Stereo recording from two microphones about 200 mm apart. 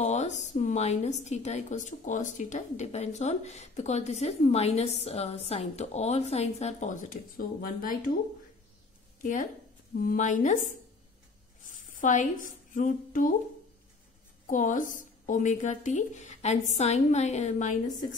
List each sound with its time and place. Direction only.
0.0 s speech: 35° left (ahead or behind)
9.2 s a woman's voice: 40° left (ahead or behind)
14.5 s speech: 40° left (ahead or behind)